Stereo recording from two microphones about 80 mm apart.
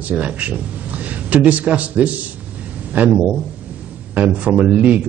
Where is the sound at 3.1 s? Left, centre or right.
Centre.